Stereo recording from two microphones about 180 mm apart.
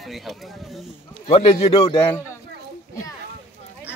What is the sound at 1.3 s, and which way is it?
Speech, 30° left (ahead or behind).